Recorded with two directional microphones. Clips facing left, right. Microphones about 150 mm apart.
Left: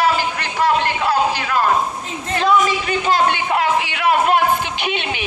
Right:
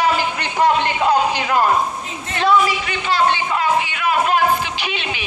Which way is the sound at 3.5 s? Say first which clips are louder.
Left 1 dB; 70° left (ahead or behind).